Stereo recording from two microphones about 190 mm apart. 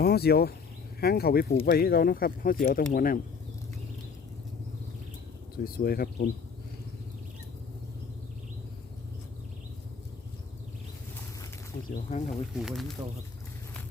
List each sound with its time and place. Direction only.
0.0 s speech: 55° left (ahead or behind)
5.6 s speech: 50° left (ahead or behind)
12.1 s speech: 35° left (ahead or behind)
12.5 s speech: centre (ahead or behind)